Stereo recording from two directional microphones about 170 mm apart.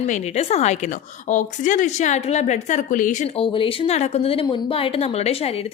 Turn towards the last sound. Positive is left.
turn(degrees=35)  # may be behind; listen again after turning